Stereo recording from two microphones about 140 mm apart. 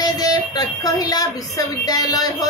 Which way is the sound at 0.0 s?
25° left (ahead or behind).